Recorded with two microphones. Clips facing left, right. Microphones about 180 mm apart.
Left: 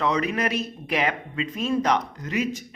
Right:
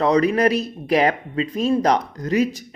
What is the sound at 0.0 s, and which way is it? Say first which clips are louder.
Speech: right 8 dB; 35° right (ahead or behind).